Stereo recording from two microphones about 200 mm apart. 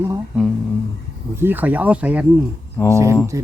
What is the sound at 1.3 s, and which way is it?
Speech, 10° right (ahead or behind).